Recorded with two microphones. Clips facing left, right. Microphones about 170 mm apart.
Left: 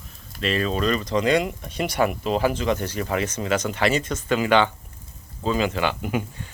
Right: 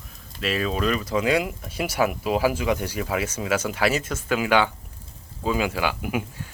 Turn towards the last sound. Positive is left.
turn(degrees=-5)  # may be behind; listen again after turning